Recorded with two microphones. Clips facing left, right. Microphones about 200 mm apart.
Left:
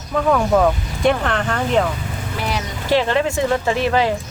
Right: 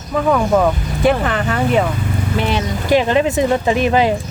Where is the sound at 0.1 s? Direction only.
5° right (ahead or behind).